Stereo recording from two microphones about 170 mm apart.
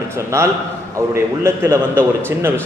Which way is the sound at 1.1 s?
15° right (ahead or behind).